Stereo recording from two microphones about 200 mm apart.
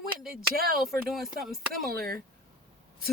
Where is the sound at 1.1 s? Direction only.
Centre (ahead or behind).